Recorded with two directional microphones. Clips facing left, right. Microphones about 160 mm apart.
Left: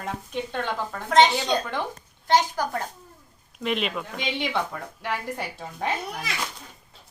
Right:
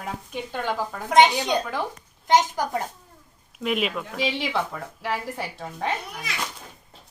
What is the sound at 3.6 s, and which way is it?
A woman's voice, 5° right (ahead or behind).